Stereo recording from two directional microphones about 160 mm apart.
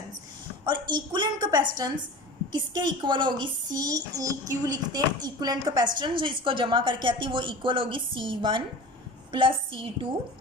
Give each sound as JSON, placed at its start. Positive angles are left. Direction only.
{"t": 0.6, "sound": "a woman's voice", "side_deg": -30}